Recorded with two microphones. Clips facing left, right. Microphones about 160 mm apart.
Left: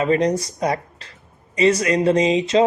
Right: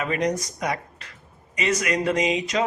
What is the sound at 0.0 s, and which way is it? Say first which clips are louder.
Speech: left 6 dB; 30° left (ahead or behind).